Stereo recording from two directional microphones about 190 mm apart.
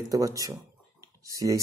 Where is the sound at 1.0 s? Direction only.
15° right (ahead or behind).